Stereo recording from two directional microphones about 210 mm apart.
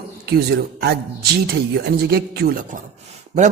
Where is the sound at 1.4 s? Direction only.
50° right (ahead or behind).